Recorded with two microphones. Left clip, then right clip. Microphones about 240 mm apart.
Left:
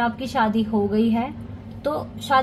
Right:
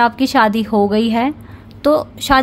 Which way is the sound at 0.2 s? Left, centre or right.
Right.